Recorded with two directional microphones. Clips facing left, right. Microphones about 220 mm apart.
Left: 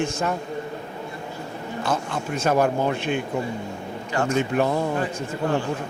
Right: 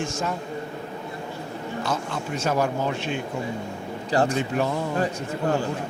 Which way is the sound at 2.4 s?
55° left (ahead or behind).